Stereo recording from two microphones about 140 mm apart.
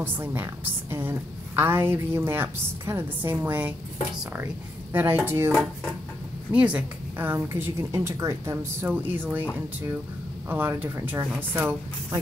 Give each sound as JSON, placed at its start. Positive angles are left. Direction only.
{"t": 0.0, "sound": "a woman's voice", "side_deg": -15}
{"t": 4.9, "sound": "a woman's voice", "side_deg": -15}
{"t": 10.5, "sound": "a woman's voice", "side_deg": -15}